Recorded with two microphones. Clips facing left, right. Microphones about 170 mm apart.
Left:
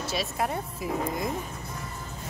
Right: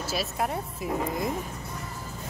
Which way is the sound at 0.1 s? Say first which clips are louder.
Even; centre (ahead or behind).